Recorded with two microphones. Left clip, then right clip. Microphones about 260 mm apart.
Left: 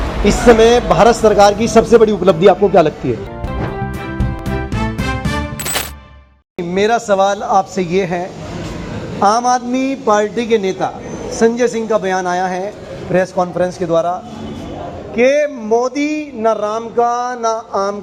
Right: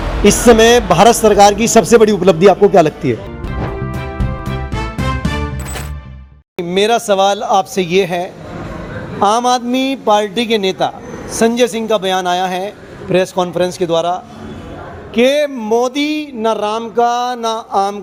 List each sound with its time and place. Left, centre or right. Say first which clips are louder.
0.3 s speech: right 1 dB; right
6.6 s a man's voice: right 1 dB; right
16.0 s speech: right 1 dB; right
16.4 s a man's voice: left 1 dB; right
17.2 s speech: even; right
17.7 s a man's voice: right 3 dB; right